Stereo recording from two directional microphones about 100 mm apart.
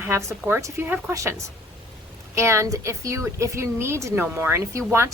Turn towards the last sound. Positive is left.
turn(degrees=-30)  # may be behind; listen again after turning